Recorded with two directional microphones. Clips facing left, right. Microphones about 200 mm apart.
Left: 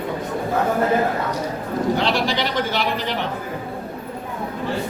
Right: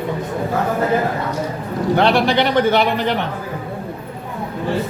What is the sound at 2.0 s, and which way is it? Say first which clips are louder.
Speech: right 6 dB; 60° right (ahead or behind).